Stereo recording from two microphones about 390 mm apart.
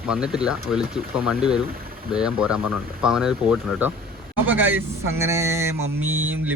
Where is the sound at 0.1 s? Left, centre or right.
Centre.